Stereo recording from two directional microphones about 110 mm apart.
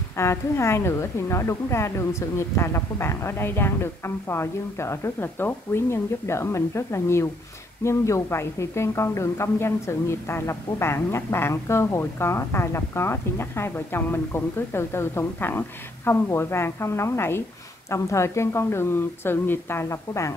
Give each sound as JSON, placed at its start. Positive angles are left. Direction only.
{"t": 0.2, "sound": "speech", "side_deg": 25}